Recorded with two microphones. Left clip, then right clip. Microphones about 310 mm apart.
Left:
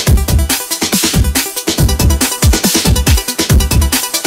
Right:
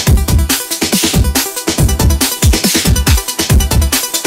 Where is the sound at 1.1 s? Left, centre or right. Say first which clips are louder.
Right 1 dB; right.